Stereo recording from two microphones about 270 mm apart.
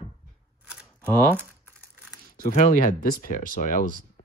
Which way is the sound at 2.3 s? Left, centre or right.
Left.